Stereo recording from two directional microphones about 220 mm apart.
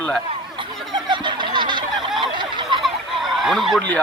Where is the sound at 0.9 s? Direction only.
20° right (ahead or behind).